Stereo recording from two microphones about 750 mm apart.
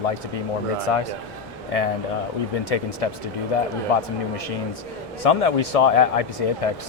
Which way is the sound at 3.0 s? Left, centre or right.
Left.